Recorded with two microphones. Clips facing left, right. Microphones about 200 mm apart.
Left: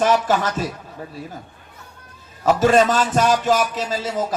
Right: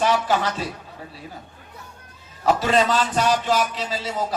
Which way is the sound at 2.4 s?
45° left (ahead or behind).